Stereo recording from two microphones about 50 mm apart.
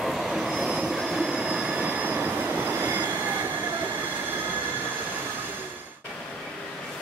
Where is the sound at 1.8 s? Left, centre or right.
Right.